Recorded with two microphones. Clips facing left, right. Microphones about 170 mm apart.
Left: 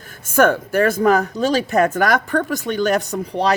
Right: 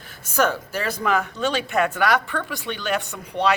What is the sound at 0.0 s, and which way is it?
A woman's voice, 50° left (ahead or behind).